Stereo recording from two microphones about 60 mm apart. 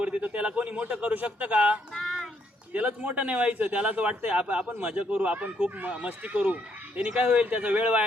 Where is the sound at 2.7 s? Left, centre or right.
Right.